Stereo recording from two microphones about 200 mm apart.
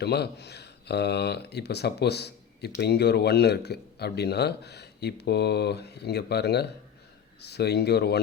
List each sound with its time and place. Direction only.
0.0 s speech: 55° left (ahead or behind)